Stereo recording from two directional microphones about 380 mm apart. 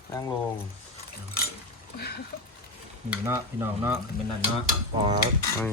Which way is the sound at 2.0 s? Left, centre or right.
Left.